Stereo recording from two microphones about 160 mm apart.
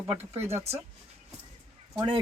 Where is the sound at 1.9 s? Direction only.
30° right (ahead or behind).